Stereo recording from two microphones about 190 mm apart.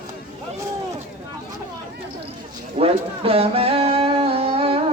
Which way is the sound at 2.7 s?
30° right (ahead or behind).